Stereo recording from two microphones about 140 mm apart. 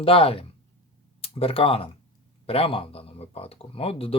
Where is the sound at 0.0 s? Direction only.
45° left (ahead or behind).